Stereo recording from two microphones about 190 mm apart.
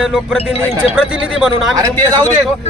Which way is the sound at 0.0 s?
5° right (ahead or behind).